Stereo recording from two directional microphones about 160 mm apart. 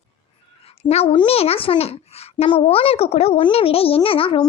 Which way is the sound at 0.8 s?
40° left (ahead or behind).